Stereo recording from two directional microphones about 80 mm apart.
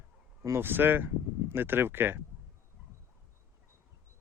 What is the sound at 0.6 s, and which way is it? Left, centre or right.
Speech, right.